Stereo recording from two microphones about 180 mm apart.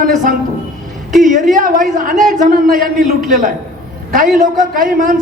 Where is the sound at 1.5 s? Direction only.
50° right (ahead or behind).